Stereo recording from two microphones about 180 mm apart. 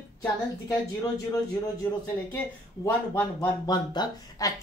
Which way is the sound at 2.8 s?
15° left (ahead or behind).